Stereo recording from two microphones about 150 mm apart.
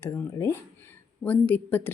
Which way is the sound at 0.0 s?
15° left (ahead or behind).